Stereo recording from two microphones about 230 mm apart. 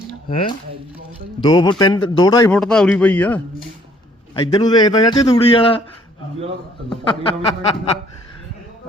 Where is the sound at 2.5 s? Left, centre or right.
Centre.